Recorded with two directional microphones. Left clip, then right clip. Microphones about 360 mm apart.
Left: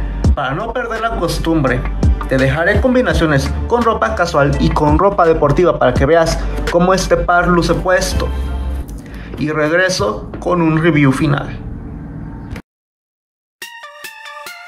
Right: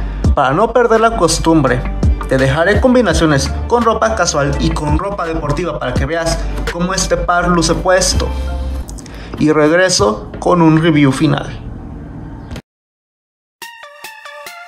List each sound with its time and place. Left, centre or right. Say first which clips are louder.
0.2 s speech: right 7 dB; centre
9.4 s speech: right 4 dB; centre